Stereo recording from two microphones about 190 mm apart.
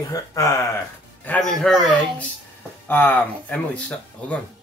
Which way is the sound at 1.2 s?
5° left (ahead or behind).